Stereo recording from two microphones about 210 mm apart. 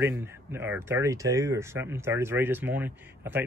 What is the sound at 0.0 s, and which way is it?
Speech, 10° right (ahead or behind).